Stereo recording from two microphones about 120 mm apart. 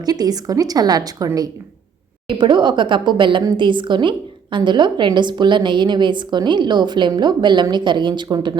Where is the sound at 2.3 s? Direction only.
40° right (ahead or behind).